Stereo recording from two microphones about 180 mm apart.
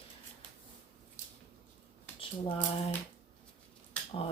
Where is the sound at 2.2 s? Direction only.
30° left (ahead or behind).